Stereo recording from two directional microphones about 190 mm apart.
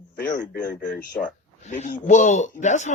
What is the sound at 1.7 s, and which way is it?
Speech, 40° left (ahead or behind).